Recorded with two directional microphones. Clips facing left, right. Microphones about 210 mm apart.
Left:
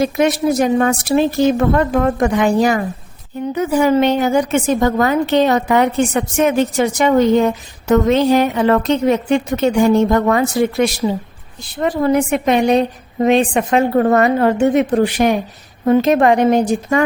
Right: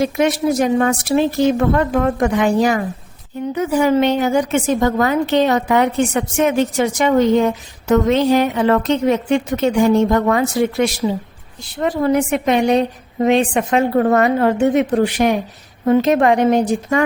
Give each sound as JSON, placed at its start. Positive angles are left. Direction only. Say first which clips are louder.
{"t": 0.0, "sound": "a woman's voice", "louder": "left 1 dB", "side_deg": 40}